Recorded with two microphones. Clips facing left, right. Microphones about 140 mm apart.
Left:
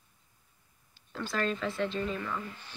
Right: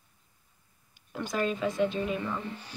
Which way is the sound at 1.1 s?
15° right (ahead or behind).